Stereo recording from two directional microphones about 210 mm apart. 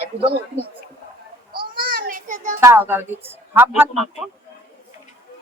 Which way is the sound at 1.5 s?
45° right (ahead or behind).